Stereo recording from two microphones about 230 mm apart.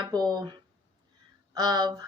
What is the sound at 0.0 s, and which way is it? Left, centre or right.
Speech, centre.